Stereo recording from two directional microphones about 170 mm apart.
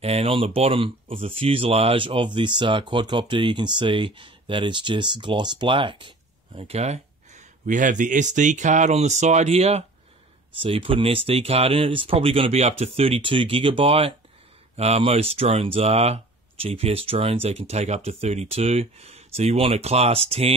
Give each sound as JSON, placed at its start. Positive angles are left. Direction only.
{"t": 0.0, "sound": "speech", "side_deg": -35}